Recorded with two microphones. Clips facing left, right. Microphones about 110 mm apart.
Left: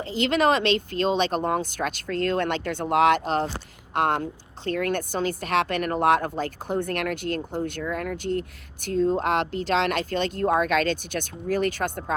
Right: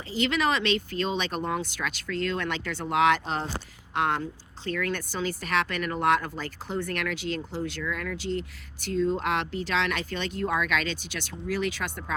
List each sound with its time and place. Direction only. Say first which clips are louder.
0.1 s speech: left 4 dB; 45° left (ahead or behind)